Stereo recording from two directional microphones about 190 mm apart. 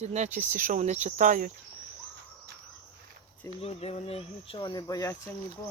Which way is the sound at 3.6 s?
30° left (ahead or behind).